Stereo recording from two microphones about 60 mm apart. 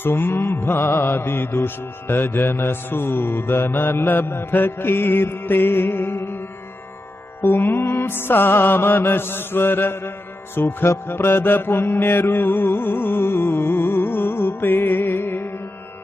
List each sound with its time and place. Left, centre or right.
0.0 s music: left
7.4 s music: left
10.5 s mantra: left